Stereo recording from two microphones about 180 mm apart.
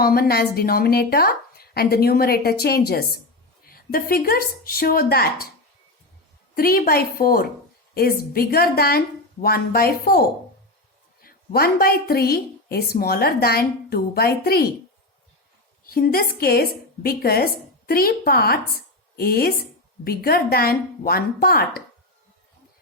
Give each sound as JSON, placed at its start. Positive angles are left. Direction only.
{"t": 0.0, "sound": "a woman's voice", "side_deg": 60}
{"t": 6.5, "sound": "a woman's voice", "side_deg": 55}
{"t": 15.9, "sound": "a woman's voice", "side_deg": 55}